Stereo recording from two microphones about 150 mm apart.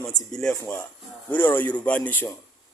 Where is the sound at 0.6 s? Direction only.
15° left (ahead or behind).